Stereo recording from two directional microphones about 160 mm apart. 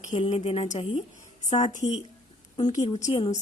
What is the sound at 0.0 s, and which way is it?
A woman's voice, 45° left (ahead or behind).